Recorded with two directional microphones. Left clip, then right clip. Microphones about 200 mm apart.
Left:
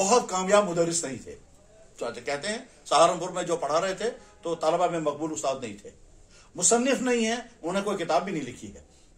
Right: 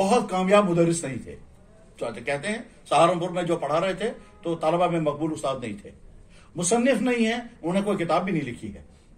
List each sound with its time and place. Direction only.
0.0 s a man's voice: 30° left (ahead or behind)